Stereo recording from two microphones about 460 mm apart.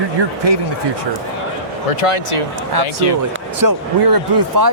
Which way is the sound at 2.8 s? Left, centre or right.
Left.